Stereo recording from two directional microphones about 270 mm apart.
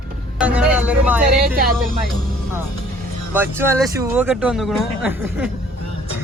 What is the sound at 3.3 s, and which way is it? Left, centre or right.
A man's voice, centre.